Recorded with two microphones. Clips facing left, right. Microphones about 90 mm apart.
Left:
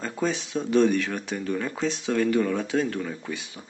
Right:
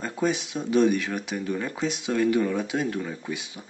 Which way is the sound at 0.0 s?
10° right (ahead or behind).